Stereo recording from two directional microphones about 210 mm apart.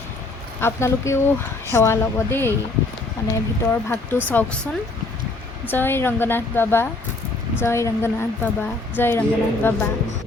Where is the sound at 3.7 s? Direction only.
10° left (ahead or behind).